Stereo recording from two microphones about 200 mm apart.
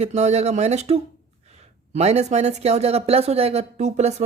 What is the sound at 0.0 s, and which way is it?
Speech, 35° right (ahead or behind).